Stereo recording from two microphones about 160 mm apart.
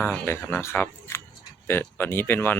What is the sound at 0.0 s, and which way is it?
Speech, 10° left (ahead or behind).